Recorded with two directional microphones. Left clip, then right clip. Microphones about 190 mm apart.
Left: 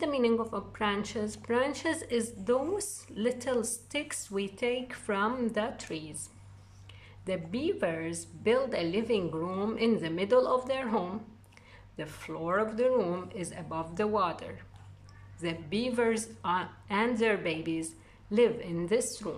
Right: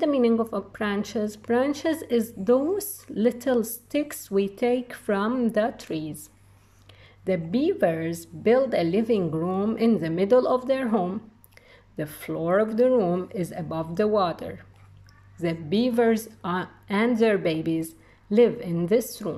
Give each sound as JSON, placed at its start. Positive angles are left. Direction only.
{"t": 0.0, "sound": "a woman's voice", "side_deg": -20}
{"t": 7.2, "sound": "a woman's voice", "side_deg": -20}